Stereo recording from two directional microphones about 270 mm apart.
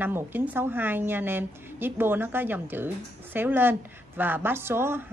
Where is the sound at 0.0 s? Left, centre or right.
Centre.